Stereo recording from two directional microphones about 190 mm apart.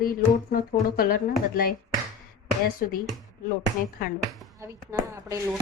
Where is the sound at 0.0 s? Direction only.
50° left (ahead or behind).